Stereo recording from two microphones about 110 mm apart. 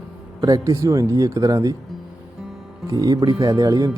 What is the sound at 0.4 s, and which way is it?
Speech, 35° right (ahead or behind).